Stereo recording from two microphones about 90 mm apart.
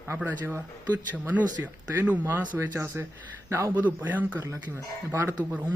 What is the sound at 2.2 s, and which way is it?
Speech, 30° right (ahead or behind).